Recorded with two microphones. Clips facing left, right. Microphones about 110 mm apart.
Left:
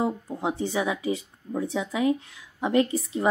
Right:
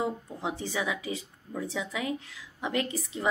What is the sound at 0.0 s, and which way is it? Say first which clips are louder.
A woman's voice: left 5 dB; 30° left (ahead or behind).